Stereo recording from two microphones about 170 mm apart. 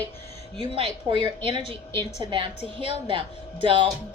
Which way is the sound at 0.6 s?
30° right (ahead or behind).